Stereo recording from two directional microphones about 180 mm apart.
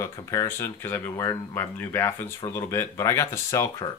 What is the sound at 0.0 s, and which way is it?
Speech, 20° left (ahead or behind).